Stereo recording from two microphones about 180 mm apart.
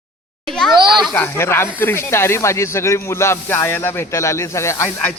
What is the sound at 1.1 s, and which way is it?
Speech, 10° left (ahead or behind).